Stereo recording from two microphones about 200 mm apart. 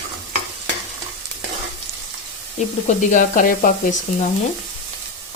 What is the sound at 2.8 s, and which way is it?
Speech, 40° left (ahead or behind).